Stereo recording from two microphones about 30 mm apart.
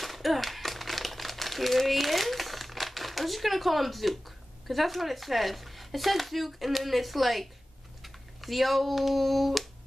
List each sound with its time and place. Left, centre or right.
0.0 s speech: centre